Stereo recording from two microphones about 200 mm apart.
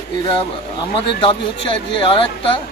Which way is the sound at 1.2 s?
25° left (ahead or behind).